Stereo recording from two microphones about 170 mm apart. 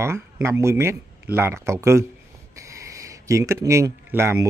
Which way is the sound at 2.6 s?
20° right (ahead or behind).